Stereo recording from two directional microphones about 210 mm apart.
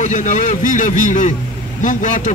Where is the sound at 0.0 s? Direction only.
35° left (ahead or behind).